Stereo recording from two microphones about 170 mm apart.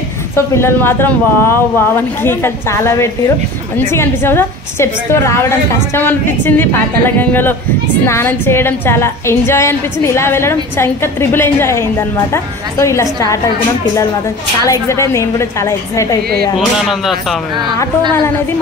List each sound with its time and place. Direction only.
0.6 s a woman's voice: 15° left (ahead or behind)
14.7 s a woman's voice: 15° left (ahead or behind)
17.0 s speech: centre (ahead or behind)